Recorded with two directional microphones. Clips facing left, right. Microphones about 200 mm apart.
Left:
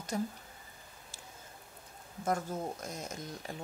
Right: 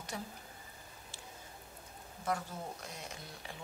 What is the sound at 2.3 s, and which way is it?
Speech, 45° left (ahead or behind).